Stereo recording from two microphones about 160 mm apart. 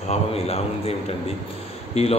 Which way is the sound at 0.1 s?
40° left (ahead or behind).